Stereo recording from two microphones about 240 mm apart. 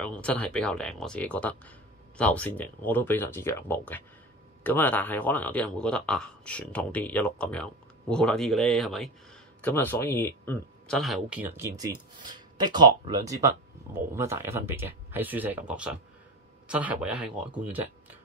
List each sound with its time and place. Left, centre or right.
0.0 s speech: centre